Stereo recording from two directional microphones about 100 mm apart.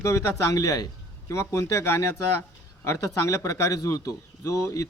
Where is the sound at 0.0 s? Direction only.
30° left (ahead or behind).